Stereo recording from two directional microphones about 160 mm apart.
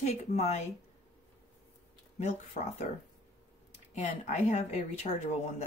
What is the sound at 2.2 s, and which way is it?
Speech, 45° left (ahead or behind).